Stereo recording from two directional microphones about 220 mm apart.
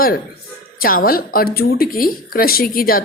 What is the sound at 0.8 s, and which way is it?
A woman's voice, 40° left (ahead or behind).